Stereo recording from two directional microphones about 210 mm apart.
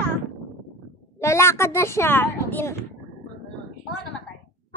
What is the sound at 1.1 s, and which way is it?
A woman's voice, 15° left (ahead or behind).